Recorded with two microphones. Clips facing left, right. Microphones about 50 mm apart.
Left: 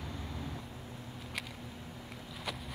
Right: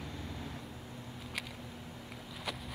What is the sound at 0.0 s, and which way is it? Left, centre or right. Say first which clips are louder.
Vehicle: left 1 dB; centre.